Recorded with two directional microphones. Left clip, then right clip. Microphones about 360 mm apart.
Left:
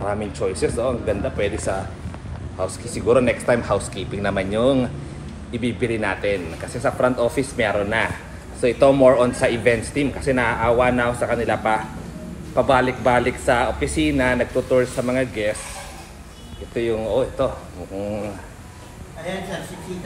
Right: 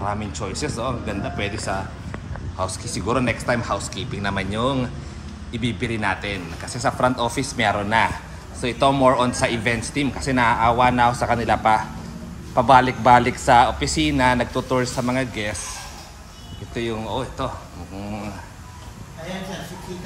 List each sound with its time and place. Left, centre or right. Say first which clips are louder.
0.0 s speech: left 3 dB; centre
2.6 s speech: left 3 dB; centre
16.7 s speech: left 5 dB; centre